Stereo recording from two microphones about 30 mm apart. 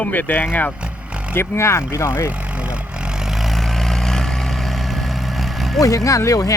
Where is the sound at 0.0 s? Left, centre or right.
Left.